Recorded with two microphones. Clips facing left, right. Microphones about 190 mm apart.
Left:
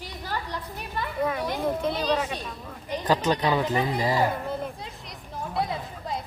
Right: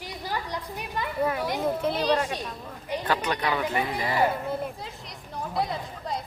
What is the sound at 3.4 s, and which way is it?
Speech, 20° left (ahead or behind).